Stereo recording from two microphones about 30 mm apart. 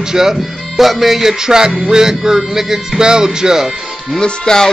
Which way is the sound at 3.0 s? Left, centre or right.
Right.